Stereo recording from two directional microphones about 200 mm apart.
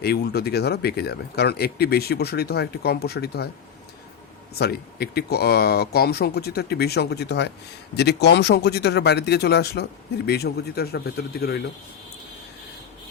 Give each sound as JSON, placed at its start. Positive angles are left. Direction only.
{"t": 0.0, "sound": "speech", "side_deg": 55}
{"t": 4.5, "sound": "speech", "side_deg": 55}